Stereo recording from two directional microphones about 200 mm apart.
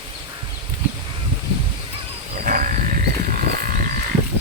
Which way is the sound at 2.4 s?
40° right (ahead or behind).